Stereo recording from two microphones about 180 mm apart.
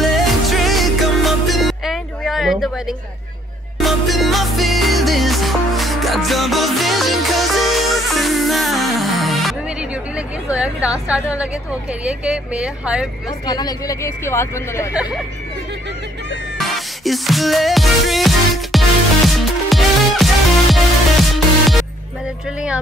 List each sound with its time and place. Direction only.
0.0 s music: centre (ahead or behind)
3.8 s music: centre (ahead or behind)
12.0 s speech: 5° right (ahead or behind)
13.5 s speech: 20° left (ahead or behind)
16.5 s music: centre (ahead or behind)